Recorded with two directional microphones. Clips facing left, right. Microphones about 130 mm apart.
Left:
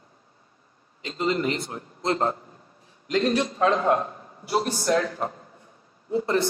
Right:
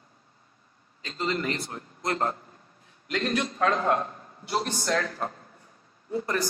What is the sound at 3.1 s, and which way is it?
Speech, 35° left (ahead or behind).